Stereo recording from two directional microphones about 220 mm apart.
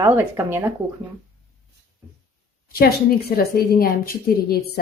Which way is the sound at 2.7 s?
45° left (ahead or behind).